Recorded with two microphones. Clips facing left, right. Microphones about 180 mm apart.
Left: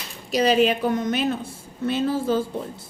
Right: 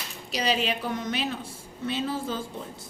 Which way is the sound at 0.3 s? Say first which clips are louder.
Left 9 dB; 50° left (ahead or behind).